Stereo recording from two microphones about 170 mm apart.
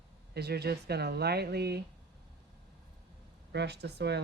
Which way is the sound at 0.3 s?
70° right (ahead or behind).